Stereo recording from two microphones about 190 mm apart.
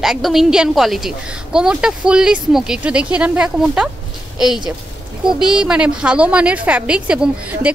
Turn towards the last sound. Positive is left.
turn(degrees=-5)  # may be behind; listen again after turning